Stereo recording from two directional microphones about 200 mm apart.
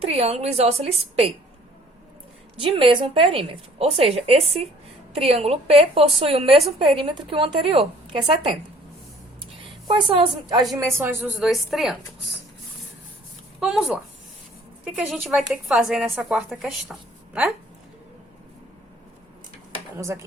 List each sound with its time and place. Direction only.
0.0 s a woman's voice: 30° right (ahead or behind)
2.6 s a woman's voice: 25° right (ahead or behind)
9.8 s a woman's voice: 25° right (ahead or behind)
10.8 s speech: 10° right (ahead or behind)
11.3 s a woman's voice: centre (ahead or behind)
13.6 s a woman's voice: 5° right (ahead or behind)
20.0 s speech: 15° right (ahead or behind)